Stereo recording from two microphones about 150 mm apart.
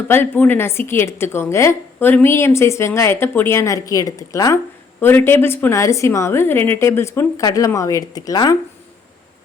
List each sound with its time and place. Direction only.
0.1 s a woman's voice: 15° left (ahead or behind)